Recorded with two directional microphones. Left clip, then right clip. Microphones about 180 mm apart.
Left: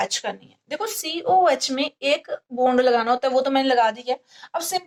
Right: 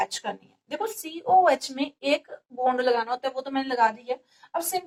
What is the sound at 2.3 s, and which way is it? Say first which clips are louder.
Speech: left 5 dB; 45° left (ahead or behind).